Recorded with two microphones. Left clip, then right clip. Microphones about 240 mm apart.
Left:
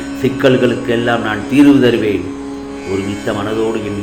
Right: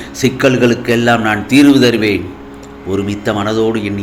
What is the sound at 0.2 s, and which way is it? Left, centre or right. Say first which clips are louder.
A man's voice: right 1 dB; right.